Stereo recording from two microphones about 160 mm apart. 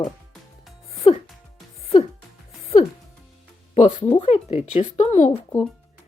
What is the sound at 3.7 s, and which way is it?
Speech, 40° left (ahead or behind).